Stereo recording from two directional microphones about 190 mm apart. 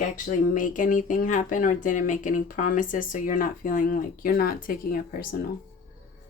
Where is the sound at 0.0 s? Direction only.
45° left (ahead or behind).